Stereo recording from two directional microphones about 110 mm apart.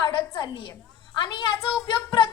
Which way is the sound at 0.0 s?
50° left (ahead or behind).